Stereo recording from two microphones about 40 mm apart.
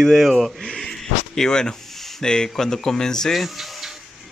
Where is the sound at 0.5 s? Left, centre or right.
Centre.